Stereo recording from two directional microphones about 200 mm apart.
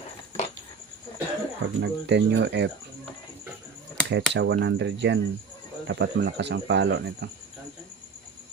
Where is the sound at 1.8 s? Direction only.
60° right (ahead or behind).